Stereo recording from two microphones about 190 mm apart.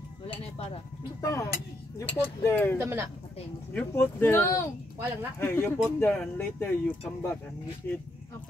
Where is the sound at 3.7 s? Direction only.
10° left (ahead or behind).